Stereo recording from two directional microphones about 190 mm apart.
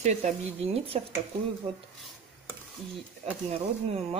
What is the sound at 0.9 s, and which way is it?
Speech, 35° right (ahead or behind).